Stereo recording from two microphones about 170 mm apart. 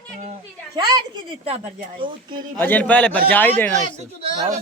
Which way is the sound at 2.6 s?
10° left (ahead or behind).